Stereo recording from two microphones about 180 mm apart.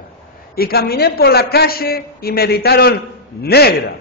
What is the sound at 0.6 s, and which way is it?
A man's voice, 60° left (ahead or behind).